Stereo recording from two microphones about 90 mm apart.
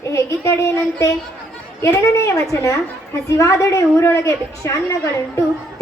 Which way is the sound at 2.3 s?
35° left (ahead or behind).